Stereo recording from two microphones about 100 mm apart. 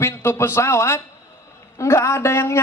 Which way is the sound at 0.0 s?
25° left (ahead or behind).